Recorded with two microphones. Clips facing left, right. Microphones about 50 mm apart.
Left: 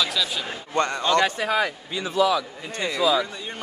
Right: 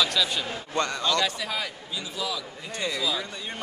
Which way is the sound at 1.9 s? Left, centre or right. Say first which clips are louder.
Left 11 dB; left.